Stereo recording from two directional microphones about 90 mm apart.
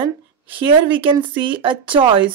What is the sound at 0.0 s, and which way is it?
A woman's voice, 70° right (ahead or behind).